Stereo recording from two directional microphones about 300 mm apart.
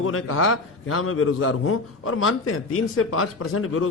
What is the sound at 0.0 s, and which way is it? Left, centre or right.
A man's voice, left.